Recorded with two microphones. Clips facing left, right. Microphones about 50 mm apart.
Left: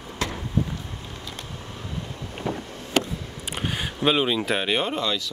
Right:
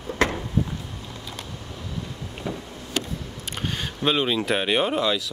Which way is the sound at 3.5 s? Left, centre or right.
Centre.